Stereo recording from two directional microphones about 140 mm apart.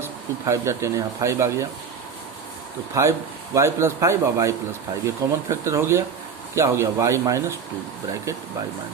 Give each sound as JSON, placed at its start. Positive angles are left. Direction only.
{"t": 0.0, "sound": "a man's voice", "side_deg": -20}
{"t": 2.9, "sound": "a man's voice", "side_deg": -20}